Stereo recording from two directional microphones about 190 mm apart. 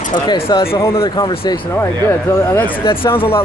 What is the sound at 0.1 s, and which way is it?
Speech, 25° left (ahead or behind).